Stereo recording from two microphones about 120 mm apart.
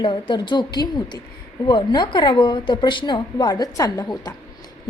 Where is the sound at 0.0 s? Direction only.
40° left (ahead or behind).